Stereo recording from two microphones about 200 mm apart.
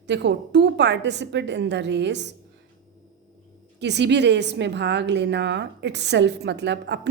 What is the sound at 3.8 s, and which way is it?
A woman's voice, 60° right (ahead or behind).